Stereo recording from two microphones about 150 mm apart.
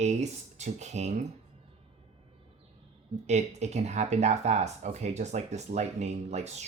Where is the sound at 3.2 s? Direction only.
50° right (ahead or behind).